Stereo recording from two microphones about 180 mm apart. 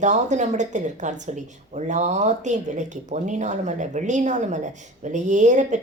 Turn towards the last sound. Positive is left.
turn(degrees=-40)  # may be behind; listen again after turning